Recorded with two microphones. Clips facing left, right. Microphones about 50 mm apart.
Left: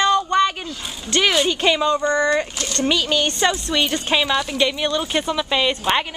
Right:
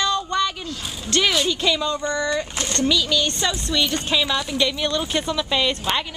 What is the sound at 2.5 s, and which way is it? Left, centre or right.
Speech, right.